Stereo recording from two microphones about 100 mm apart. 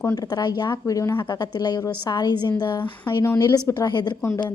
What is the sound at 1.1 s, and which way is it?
A woman's voice, 45° left (ahead or behind).